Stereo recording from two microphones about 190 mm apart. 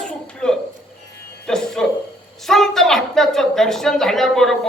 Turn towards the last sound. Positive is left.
turn(degrees=0)  # may be behind; listen again after turning